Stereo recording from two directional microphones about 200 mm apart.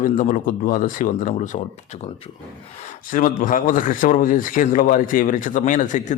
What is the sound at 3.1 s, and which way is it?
A man's voice, 40° left (ahead or behind).